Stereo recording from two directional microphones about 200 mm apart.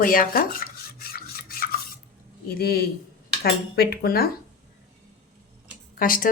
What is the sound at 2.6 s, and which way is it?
A woman's voice, 50° left (ahead or behind).